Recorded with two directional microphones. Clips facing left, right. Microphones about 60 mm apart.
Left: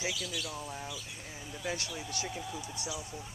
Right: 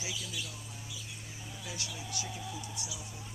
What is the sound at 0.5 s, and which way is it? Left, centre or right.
Speech, left.